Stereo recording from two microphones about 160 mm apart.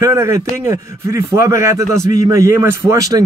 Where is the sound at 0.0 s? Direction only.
20° right (ahead or behind).